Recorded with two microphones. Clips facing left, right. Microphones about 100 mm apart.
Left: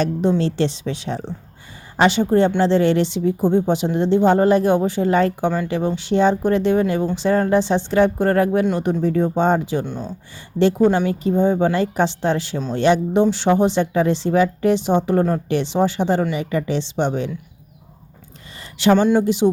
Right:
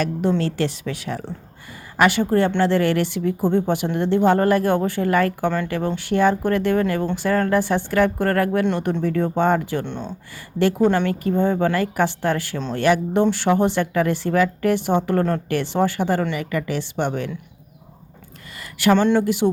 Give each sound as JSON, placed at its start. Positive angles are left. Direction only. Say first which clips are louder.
{"t": 0.0, "sound": "a woman's voice", "louder": "left 2 dB", "side_deg": 25}
{"t": 9.8, "sound": "speech", "louder": "left 1 dB", "side_deg": 5}
{"t": 10.9, "sound": "a woman's voice", "louder": "left 2 dB", "side_deg": 20}
{"t": 18.6, "sound": "a sound", "louder": "left 2 dB", "side_deg": 25}
{"t": 19.2, "sound": "a woman's voice", "louder": "left 2 dB", "side_deg": 20}